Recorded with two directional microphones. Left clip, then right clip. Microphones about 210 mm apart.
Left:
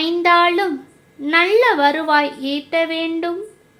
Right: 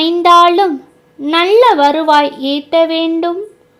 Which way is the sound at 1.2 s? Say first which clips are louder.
Right 5 dB; 30° right (ahead or behind).